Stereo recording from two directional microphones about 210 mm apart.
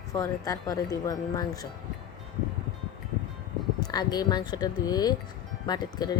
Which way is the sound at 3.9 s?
20° left (ahead or behind).